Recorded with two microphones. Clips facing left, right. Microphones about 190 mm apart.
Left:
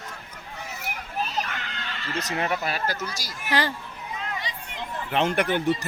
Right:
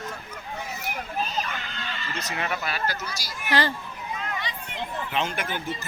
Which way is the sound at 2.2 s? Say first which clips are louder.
Left 3 dB; 40° left (ahead or behind).